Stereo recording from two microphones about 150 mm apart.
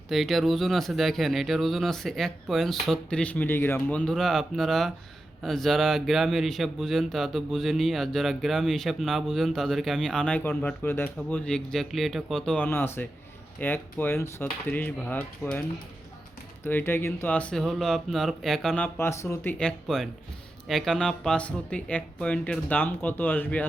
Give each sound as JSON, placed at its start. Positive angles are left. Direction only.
{"t": 0.1, "sound": "speech", "side_deg": 0}
{"t": 16.6, "sound": "speech", "side_deg": 15}
{"t": 18.9, "sound": "speech", "side_deg": 15}